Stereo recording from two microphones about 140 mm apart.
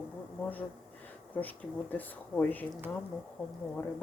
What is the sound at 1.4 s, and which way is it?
Speech, 10° left (ahead or behind).